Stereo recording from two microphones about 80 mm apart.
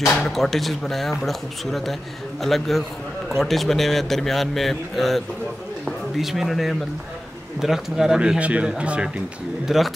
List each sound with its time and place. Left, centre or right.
0.2 s a man's voice: centre
9.7 s a man's voice: centre